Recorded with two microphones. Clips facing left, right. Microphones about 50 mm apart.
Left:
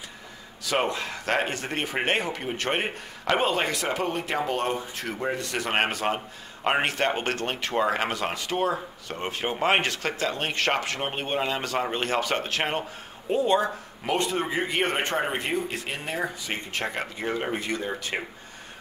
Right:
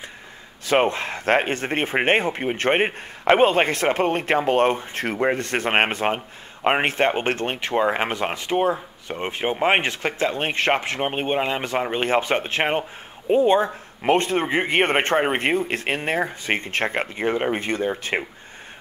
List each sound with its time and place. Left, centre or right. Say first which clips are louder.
0.7 s speech: right 6 dB; right